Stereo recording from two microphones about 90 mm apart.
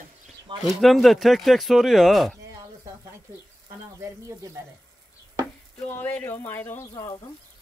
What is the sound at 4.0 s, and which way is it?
Speech, 35° right (ahead or behind).